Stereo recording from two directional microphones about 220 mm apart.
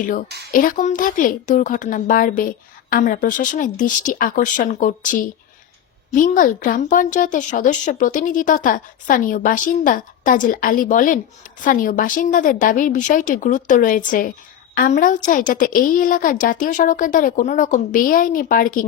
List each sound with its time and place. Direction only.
0.5 s speech: 35° left (ahead or behind)